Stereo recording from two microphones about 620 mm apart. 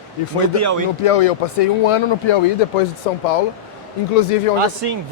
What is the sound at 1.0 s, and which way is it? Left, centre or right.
A man's voice, left.